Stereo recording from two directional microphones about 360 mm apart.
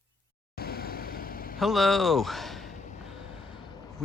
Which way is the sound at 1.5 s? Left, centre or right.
Centre.